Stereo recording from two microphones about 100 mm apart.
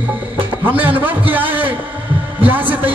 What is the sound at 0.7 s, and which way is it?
Speech, 15° right (ahead or behind).